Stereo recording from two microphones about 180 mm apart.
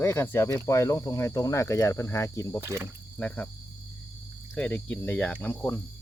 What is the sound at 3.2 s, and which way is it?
Speech, 10° left (ahead or behind).